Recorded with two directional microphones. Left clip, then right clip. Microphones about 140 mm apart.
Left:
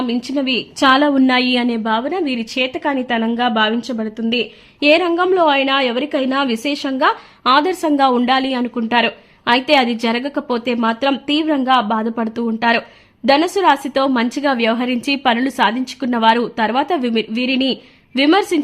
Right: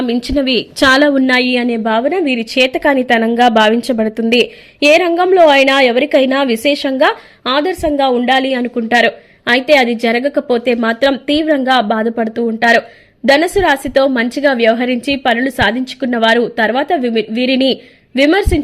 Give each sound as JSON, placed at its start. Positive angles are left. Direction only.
{"t": 0.1, "sound": "a woman's voice", "side_deg": -20}
{"t": 1.3, "sound": "a woman's voice", "side_deg": 0}
{"t": 1.9, "sound": "a woman's voice", "side_deg": -20}
{"t": 4.8, "sound": "a woman's voice", "side_deg": -15}
{"t": 7.5, "sound": "a woman's voice", "side_deg": 0}
{"t": 18.1, "sound": "a woman's voice", "side_deg": 0}